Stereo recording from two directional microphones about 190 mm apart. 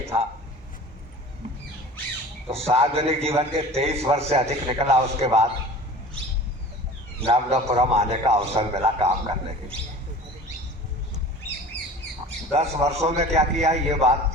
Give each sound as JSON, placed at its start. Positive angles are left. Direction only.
{"t": 0.1, "sound": "a man's voice", "side_deg": -30}
{"t": 2.5, "sound": "a man's voice", "side_deg": -30}
{"t": 7.2, "sound": "a man's voice", "side_deg": -35}
{"t": 12.5, "sound": "a man's voice", "side_deg": -35}